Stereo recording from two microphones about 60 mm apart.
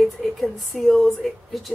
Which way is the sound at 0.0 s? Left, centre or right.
Centre.